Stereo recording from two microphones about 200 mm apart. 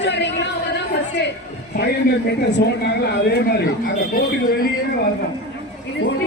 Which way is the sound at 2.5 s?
55° left (ahead or behind).